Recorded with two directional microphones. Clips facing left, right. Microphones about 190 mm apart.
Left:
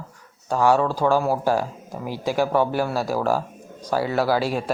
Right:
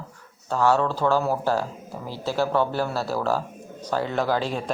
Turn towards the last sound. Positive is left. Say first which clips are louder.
# left 3 dB
turn(degrees=10)  # may be behind; listen again after turning